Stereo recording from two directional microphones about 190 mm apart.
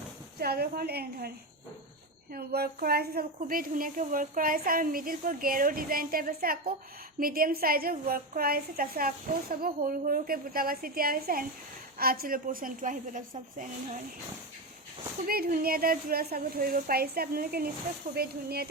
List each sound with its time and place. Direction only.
0.3 s a woman's voice: 55° right (ahead or behind)
2.3 s speech: 55° right (ahead or behind)
15.3 s a woman's voice: 50° right (ahead or behind)